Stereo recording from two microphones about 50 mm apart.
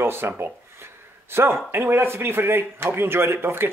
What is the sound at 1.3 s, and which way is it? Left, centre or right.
A man's voice, right.